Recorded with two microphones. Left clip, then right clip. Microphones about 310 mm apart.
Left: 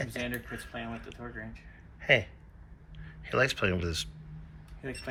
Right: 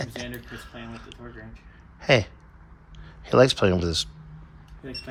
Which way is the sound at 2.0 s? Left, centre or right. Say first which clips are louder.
Right 5 dB; centre.